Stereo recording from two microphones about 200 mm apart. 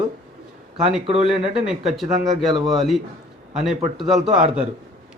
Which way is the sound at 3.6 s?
Centre (ahead or behind).